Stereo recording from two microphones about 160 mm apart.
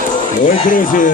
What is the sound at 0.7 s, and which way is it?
Speech, 55° left (ahead or behind).